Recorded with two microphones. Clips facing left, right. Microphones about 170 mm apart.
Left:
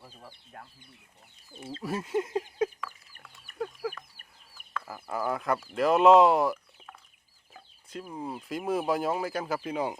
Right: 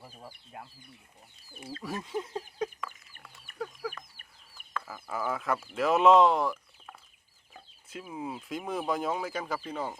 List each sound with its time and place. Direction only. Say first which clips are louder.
0.3 s speech: right 3 dB; 10° right (ahead or behind)
1.5 s chicken: left 2 dB; 25° left (ahead or behind)
1.8 s speech: left 5 dB; 5° left (ahead or behind)
2.8 s chicken: even; centre (ahead or behind)
4.9 s speech: left 3 dB; 5° left (ahead or behind)
7.5 s chicken: left 3 dB; 5° right (ahead or behind)
8.4 s speech: left 5 dB; centre (ahead or behind)
9.6 s speech: left 4 dB; 15° left (ahead or behind)